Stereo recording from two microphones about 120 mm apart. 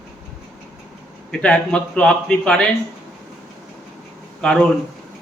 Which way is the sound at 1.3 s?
10° left (ahead or behind).